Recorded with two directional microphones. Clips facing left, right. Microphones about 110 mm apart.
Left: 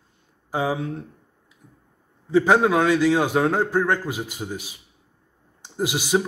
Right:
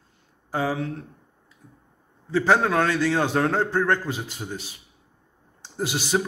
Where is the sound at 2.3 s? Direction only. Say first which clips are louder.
Left 3 dB; 15° left (ahead or behind).